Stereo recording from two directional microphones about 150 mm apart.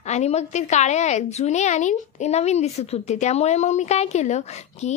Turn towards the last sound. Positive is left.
turn(degrees=50)  # may be behind; listen again after turning